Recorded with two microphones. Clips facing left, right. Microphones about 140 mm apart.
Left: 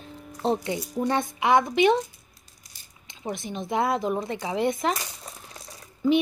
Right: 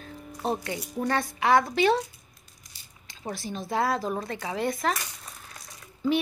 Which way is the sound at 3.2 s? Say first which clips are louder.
Left 2 dB; 20° left (ahead or behind).